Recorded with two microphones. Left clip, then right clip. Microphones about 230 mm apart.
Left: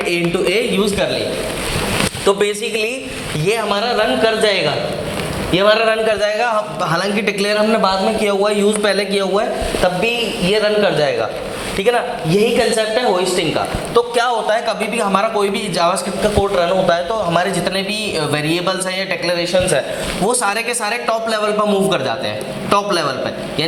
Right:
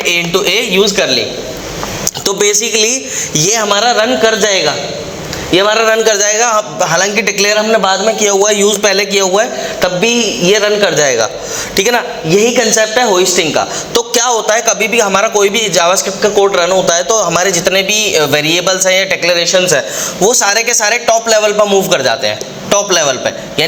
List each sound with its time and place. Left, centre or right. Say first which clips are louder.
0.1 s a man's voice: right 6 dB; right
2.2 s a man's voice: right 5 dB; right